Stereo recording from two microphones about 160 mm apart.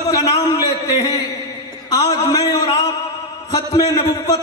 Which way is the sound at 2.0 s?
20° left (ahead or behind).